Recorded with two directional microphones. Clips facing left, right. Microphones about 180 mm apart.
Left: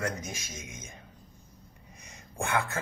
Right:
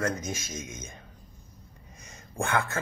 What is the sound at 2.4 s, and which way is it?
Speech, 15° left (ahead or behind).